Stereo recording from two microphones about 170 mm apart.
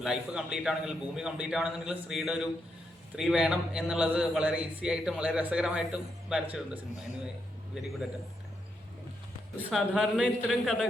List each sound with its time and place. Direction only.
0.0 s a man's voice: 5° right (ahead or behind)
9.6 s a man's voice: centre (ahead or behind)